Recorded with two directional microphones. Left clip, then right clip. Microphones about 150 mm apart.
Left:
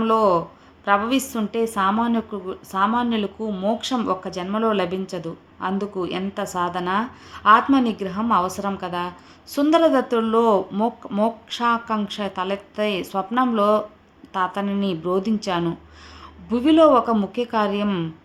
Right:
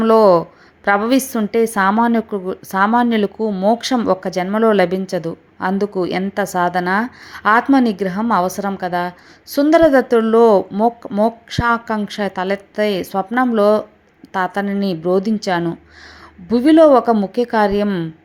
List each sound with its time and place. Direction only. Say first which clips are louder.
0.0 s a woman's voice: right 7 dB; 40° right (ahead or behind); by 18.1 s 25° right (ahead or behind)